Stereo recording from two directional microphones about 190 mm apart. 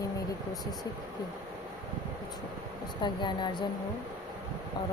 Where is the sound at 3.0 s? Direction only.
25° left (ahead or behind).